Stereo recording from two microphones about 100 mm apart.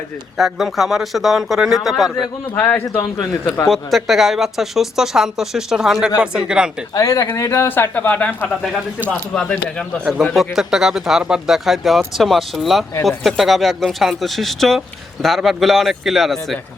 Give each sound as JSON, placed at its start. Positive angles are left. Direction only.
{"t": 0.3, "sound": "speech", "side_deg": 0}
{"t": 2.6, "sound": "speech", "side_deg": 20}
{"t": 3.0, "sound": "a man's voice", "side_deg": 45}
{"t": 3.7, "sound": "speech", "side_deg": 0}
{"t": 6.9, "sound": "speech", "side_deg": 35}
{"t": 10.3, "sound": "speech", "side_deg": 0}